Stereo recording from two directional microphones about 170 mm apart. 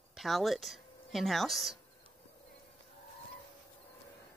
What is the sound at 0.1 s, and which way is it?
Speech, centre (ahead or behind).